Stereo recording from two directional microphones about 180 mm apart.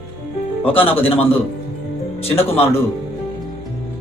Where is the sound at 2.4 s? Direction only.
30° left (ahead or behind).